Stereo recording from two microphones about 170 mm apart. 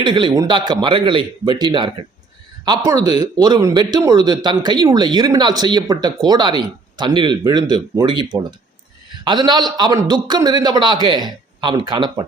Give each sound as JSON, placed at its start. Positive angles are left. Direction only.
{"t": 0.0, "sound": "a man's voice", "side_deg": -25}